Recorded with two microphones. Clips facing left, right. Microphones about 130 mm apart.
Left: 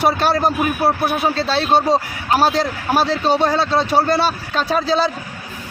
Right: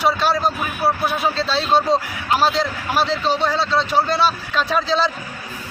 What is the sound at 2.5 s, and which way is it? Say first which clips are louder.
A man's voice: left 3 dB; 40° left (ahead or behind).